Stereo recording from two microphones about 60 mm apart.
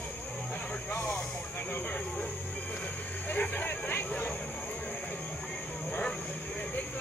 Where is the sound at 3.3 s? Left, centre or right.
Left.